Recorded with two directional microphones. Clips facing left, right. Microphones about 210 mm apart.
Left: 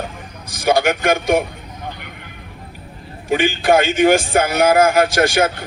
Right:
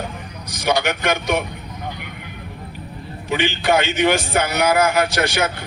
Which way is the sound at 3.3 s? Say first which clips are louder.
Left 4 dB; 50° left (ahead or behind).